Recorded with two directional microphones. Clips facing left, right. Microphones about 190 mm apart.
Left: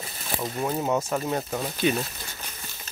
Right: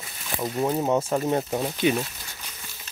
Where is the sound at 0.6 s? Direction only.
25° right (ahead or behind).